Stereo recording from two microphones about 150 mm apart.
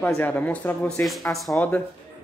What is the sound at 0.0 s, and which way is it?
Speech, 10° left (ahead or behind).